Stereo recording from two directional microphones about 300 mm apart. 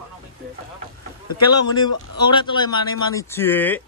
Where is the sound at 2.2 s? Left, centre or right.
Centre.